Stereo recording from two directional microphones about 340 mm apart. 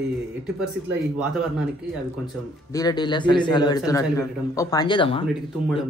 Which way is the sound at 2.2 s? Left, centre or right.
Centre.